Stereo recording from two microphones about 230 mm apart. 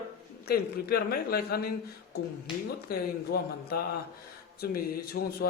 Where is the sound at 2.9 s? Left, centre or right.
Left.